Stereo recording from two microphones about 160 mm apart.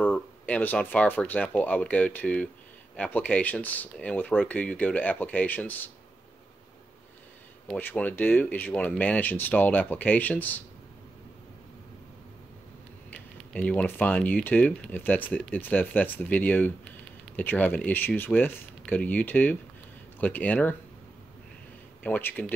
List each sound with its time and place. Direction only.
0.0 s speech: 10° left (ahead or behind)
7.6 s speech: 10° left (ahead or behind)
13.1 s speech: 5° left (ahead or behind)
22.0 s speech: 10° left (ahead or behind)